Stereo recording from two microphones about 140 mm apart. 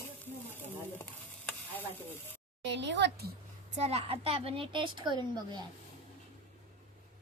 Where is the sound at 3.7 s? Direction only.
50° right (ahead or behind); by 5.7 s 30° right (ahead or behind).